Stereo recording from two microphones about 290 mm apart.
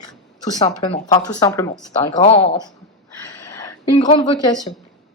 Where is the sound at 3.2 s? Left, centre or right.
Centre.